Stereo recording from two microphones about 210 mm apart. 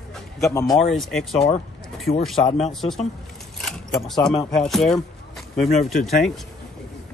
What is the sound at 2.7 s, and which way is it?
Speech, centre (ahead or behind).